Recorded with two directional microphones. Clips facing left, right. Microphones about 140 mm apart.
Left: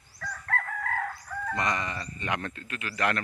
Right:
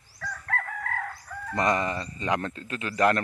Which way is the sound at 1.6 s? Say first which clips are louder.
Right 7 dB; 40° right (ahead or behind).